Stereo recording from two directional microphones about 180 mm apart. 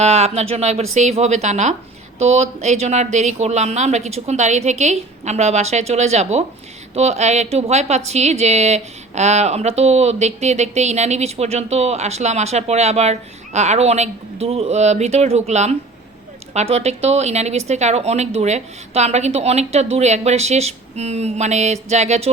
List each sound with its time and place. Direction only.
0.0 s a woman's voice: 35° right (ahead or behind)